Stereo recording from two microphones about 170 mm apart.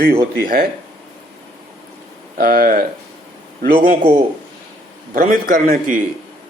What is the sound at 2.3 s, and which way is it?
A man's voice, 60° right (ahead or behind).